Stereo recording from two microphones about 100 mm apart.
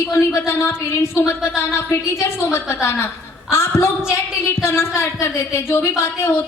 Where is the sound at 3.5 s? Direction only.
25° left (ahead or behind).